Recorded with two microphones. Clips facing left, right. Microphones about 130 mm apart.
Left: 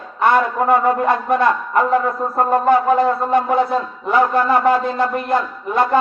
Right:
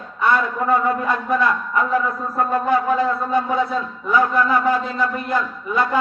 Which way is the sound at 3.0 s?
55° left (ahead or behind).